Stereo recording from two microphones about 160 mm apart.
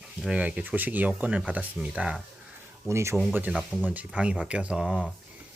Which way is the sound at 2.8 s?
15° right (ahead or behind).